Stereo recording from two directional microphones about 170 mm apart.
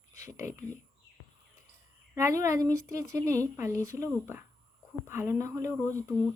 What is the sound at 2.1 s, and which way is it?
Speech, 20° right (ahead or behind).